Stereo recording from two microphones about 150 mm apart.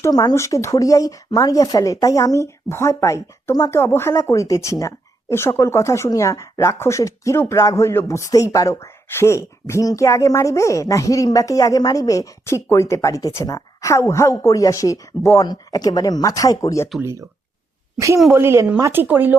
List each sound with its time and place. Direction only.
0.0 s speech: 25° left (ahead or behind)
17.0 s speech: 20° right (ahead or behind)
18.3 s speech: 15° right (ahead or behind)